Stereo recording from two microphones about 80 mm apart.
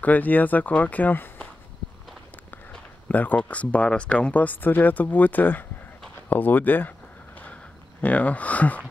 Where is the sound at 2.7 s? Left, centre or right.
Left.